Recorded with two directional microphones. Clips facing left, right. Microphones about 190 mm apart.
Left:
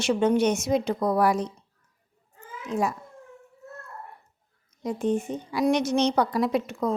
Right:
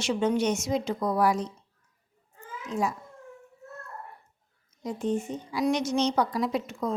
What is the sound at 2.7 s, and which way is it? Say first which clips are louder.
Speech: left 2 dB; 60° left (ahead or behind).